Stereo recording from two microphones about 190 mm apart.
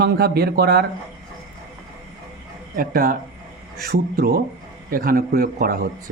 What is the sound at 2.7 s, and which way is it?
Speech, 50° right (ahead or behind).